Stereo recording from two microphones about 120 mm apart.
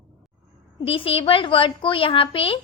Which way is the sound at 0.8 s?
50° left (ahead or behind).